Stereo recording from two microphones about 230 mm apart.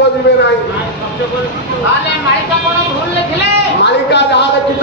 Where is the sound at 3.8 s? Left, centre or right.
Left.